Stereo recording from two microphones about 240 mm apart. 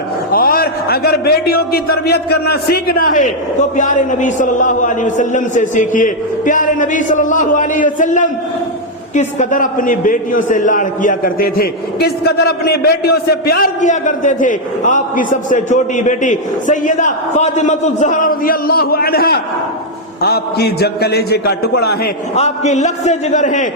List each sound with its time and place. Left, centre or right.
0.3 s a man's voice: left
22.4 s a man's voice: left